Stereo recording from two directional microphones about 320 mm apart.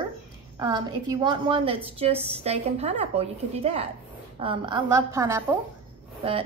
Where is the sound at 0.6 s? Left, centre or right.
Centre.